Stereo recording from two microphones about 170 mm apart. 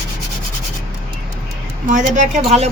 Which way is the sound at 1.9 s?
45° right (ahead or behind).